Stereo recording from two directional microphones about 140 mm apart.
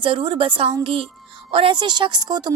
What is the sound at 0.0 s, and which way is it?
A woman's voice, 40° right (ahead or behind).